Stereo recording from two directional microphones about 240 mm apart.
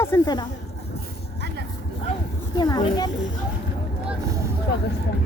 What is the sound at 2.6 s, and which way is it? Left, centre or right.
Speech, centre.